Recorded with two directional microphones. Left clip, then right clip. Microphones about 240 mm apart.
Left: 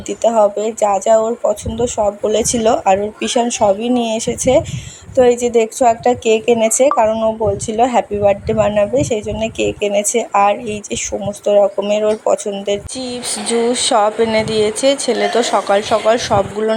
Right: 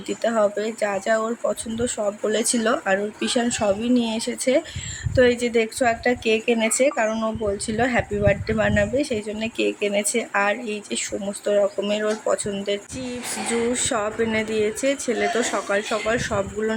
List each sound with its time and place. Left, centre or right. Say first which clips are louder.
0.2 s a woman's voice: left 9 dB; centre
4.0 s speech: left 8 dB; centre
5.1 s a woman's voice: left 7 dB; centre